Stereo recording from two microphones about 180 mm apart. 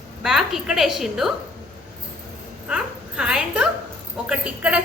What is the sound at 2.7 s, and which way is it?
A woman's voice, 5° right (ahead or behind).